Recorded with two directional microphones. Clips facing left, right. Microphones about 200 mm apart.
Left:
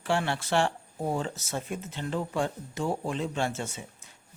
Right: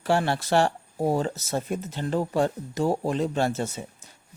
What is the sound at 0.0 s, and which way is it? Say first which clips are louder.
Speech: right 5 dB; 40° right (ahead or behind).